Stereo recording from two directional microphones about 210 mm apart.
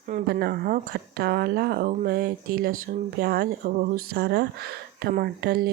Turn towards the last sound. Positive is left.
turn(degrees=-50)  # may be behind; listen again after turning